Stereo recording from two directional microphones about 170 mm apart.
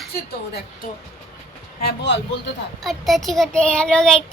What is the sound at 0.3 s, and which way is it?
Speech, 70° left (ahead or behind).